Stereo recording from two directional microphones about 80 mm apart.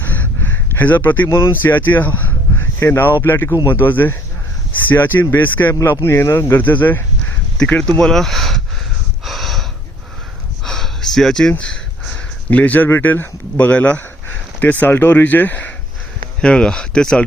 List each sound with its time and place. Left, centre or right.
0.0 s a sound: left
1.3 s speech: left
6.6 s speech: left
7.8 s speech: centre
9.2 s snort: centre
10.6 s a sound: centre
11.5 s speech: centre
16.4 s speech: centre